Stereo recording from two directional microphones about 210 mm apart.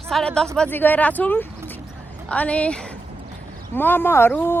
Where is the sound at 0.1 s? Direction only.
Centre (ahead or behind).